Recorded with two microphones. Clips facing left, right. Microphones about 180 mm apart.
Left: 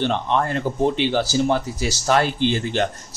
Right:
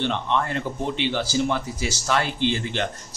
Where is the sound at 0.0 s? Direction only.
40° left (ahead or behind).